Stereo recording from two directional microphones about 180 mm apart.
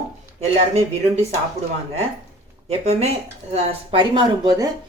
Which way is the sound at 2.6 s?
35° right (ahead or behind).